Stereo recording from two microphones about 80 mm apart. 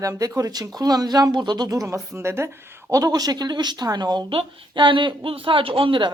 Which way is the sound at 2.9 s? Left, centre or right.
Right.